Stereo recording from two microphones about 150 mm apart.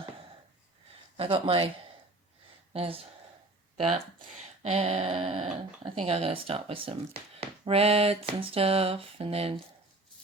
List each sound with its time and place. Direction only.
1.1 s speech: 40° right (ahead or behind)
2.7 s speech: 40° right (ahead or behind)
4.6 s speech: 45° right (ahead or behind)